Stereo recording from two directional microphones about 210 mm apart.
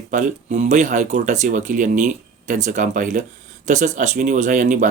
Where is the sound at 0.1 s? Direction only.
35° right (ahead or behind).